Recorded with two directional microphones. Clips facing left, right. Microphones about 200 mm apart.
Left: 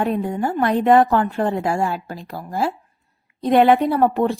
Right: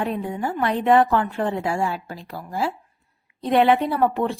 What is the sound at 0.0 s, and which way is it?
A woman's voice, 45° left (ahead or behind).